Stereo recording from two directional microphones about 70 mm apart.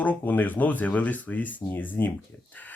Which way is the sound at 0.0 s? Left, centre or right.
Left.